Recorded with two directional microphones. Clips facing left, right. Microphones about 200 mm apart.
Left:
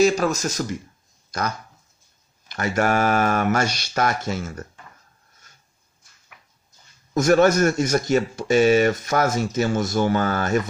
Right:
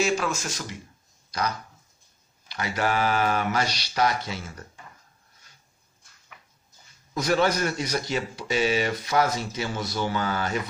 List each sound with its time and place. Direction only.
0.0 s speech: 40° left (ahead or behind)
5.5 s a sound: 45° left (ahead or behind)
7.2 s speech: 45° left (ahead or behind)